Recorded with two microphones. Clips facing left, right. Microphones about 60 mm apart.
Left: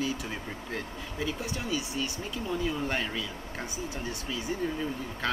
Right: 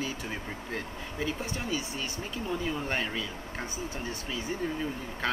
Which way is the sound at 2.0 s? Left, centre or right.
Right.